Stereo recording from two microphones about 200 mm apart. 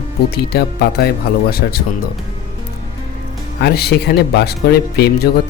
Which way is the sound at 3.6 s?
55° left (ahead or behind).